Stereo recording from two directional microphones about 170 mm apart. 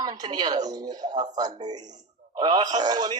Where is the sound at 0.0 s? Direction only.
25° right (ahead or behind).